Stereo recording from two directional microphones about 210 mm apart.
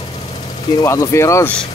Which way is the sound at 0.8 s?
15° left (ahead or behind).